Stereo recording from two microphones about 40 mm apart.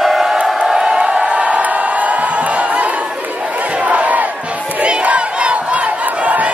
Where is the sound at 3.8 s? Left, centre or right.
Right.